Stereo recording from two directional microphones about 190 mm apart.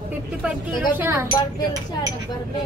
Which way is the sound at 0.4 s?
10° right (ahead or behind).